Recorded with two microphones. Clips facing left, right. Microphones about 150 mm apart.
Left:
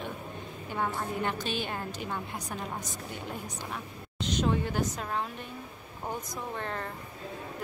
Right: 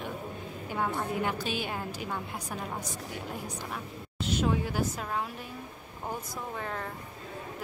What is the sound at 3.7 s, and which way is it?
A woman's voice, 5° right (ahead or behind).